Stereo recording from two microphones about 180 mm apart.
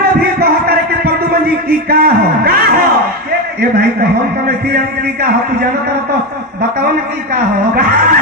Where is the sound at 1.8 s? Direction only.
55° right (ahead or behind).